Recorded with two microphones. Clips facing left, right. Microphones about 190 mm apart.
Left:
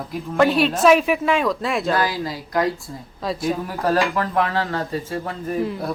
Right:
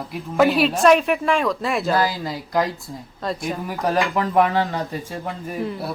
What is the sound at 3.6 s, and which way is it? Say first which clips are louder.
Speech: right 1 dB; 15° right (ahead or behind).